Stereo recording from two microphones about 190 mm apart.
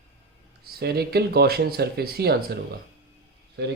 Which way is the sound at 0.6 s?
55° right (ahead or behind).